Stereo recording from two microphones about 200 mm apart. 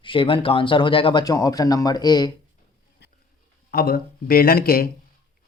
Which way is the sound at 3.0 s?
55° left (ahead or behind).